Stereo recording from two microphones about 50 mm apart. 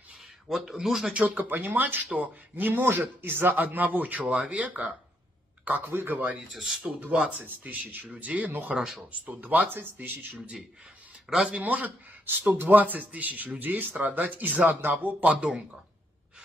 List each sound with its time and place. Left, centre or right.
0.5 s speech: centre
1.1 s speech: right
1.6 s speech: right
5.9 s speech: right
6.5 s speech: centre
7.1 s speech: right
7.3 s speech: right
8.5 s speech: right
11.2 s a man's voice: centre
11.6 s speech: right
15.4 s speech: centre